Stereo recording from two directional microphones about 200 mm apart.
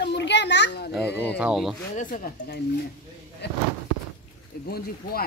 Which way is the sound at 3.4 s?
55° left (ahead or behind).